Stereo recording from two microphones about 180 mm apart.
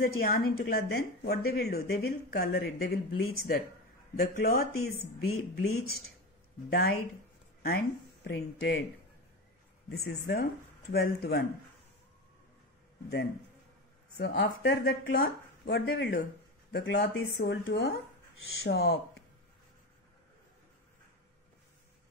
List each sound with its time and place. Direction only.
0.0 s a woman's voice: 55° left (ahead or behind)
4.2 s a woman's voice: 60° left (ahead or behind)
9.8 s a woman's voice: 65° left (ahead or behind)
14.1 s a woman's voice: 65° left (ahead or behind)